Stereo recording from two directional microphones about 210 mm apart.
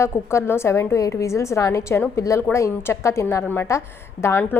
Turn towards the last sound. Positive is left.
turn(degrees=10)  # may be behind; listen again after turning